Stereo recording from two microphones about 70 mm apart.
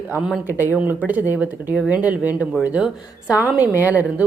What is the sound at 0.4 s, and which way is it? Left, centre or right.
A woman's voice, right.